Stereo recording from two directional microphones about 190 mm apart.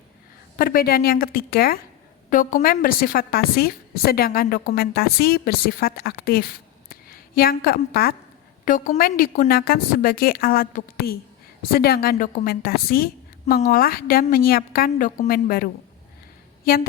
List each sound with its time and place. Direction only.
0.6 s a woman's voice: 50° left (ahead or behind)
6.8 s a sound: 50° left (ahead or behind)
8.6 s a woman's voice: 45° left (ahead or behind)